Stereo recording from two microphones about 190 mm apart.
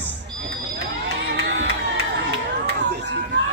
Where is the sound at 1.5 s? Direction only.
70° right (ahead or behind).